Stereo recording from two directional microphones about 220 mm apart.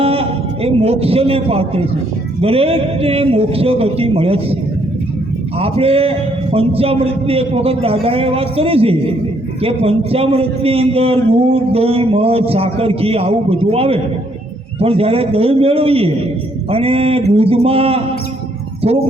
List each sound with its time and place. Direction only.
0.0 s a sound: 25° right (ahead or behind)
2.4 s a man's voice: 25° right (ahead or behind)
5.5 s a man's voice: 25° right (ahead or behind)